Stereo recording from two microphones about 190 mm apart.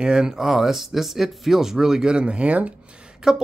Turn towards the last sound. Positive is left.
turn(degrees=-5)  # may be behind; listen again after turning